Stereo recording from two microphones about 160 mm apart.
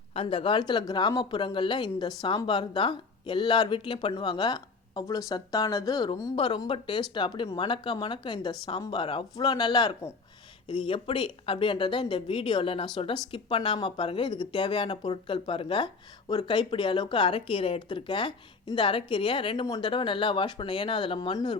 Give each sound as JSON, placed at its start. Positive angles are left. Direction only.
{"t": 0.1, "sound": "speech", "side_deg": 35}